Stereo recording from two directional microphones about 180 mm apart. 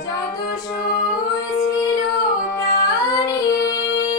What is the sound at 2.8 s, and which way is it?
Music, 20° left (ahead or behind).